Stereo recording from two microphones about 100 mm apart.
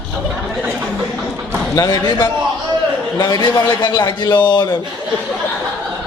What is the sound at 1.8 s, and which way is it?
A man's voice, 45° left (ahead or behind).